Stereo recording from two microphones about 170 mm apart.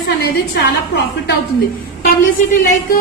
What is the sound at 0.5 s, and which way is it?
Speech, 90° left.